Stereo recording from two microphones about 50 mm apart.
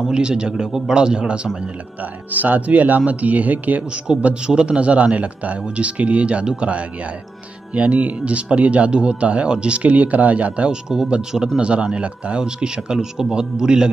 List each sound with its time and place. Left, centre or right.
0.1 s a man's voice: centre
2.3 s speech: right
3.9 s a man's voice: right
10.7 s speech: centre